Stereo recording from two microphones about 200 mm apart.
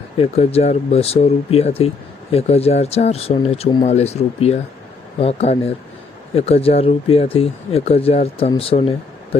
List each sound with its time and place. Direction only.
0.2 s speech: 30° left (ahead or behind)